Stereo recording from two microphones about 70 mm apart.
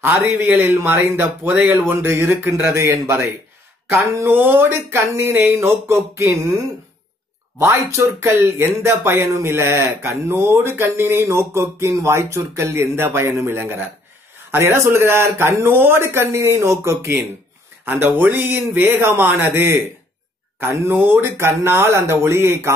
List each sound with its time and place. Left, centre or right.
0.0 s speech: right
3.9 s speech: right
7.5 s speech: right
17.8 s speech: right
20.9 s speech: right